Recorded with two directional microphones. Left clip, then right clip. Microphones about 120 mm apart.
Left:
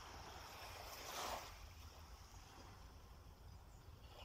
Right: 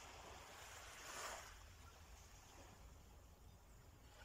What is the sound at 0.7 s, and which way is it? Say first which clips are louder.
Boat: left 4 dB; 25° left (ahead or behind).